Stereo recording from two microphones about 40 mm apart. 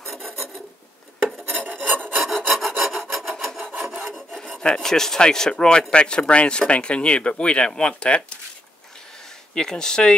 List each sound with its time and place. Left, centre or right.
0.0 s filing: centre
1.6 s filing: centre
2.1 s filing: centre
2.9 s rub: centre
4.0 s filing: centre
4.6 s speech: centre
9.5 s speech: centre